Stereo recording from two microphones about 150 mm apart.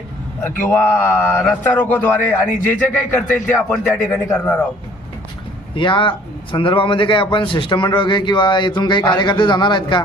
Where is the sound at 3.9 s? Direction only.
5° left (ahead or behind).